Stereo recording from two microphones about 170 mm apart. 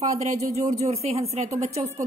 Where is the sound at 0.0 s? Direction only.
40° right (ahead or behind).